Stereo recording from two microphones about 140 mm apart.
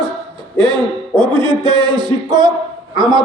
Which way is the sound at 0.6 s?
35° right (ahead or behind).